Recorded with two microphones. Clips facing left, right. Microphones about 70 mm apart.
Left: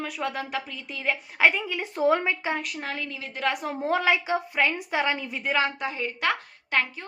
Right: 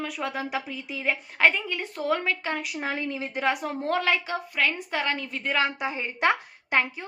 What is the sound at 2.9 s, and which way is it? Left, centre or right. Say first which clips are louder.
Speech: right 4 dB; right.